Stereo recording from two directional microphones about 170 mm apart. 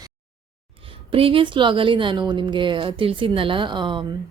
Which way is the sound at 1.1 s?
30° right (ahead or behind).